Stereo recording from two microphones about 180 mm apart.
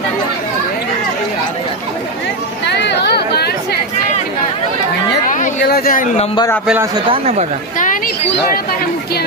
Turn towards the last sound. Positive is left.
turn(degrees=-35)  # may be behind; listen again after turning